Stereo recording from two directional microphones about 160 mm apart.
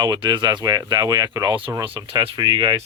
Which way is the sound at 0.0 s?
30° right (ahead or behind).